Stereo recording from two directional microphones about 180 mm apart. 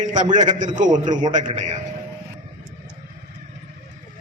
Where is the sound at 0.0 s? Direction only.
45° right (ahead or behind).